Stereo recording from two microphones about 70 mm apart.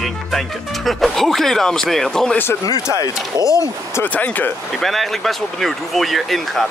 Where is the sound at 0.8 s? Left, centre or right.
Centre.